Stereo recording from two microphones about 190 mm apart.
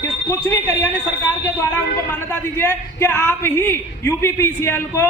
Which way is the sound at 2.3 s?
10° left (ahead or behind).